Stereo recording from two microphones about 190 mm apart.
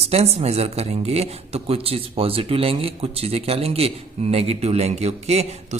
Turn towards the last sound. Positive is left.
turn(degrees=-35)  # may be behind; listen again after turning